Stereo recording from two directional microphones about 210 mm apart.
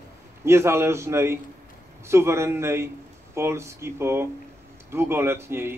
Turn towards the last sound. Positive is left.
turn(degrees=-10)  # may be behind; listen again after turning